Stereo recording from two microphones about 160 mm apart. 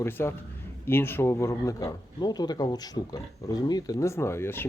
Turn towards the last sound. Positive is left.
turn(degrees=15)  # may be behind; listen again after turning